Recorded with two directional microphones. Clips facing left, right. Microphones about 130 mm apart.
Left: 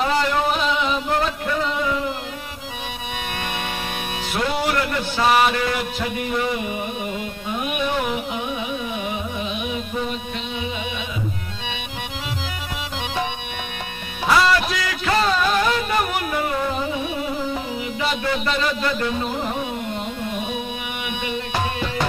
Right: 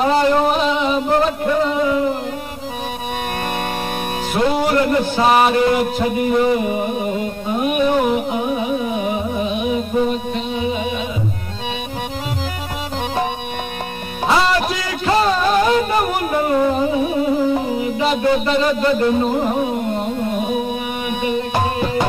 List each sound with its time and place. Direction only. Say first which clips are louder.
0.0 s a sound: right 6 dB; 30° right (ahead or behind)
0.4 s music: right 4 dB; 35° right (ahead or behind)
4.4 s music: right 6 dB; 40° right (ahead or behind)
4.8 s a sound: right 8 dB; 40° right (ahead or behind)
5.2 s music: right 3 dB; 35° right (ahead or behind)
14.2 s music: right 2 dB; 25° right (ahead or behind); by 21.9 s 40° right (ahead or behind)